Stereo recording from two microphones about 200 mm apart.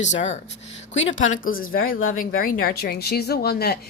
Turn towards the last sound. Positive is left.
turn(degrees=50)  # may be behind; listen again after turning